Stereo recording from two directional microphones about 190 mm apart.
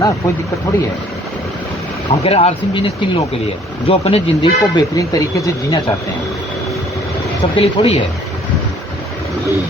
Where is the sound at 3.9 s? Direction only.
30° left (ahead or behind).